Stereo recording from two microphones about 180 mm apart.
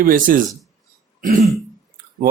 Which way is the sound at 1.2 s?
45° right (ahead or behind).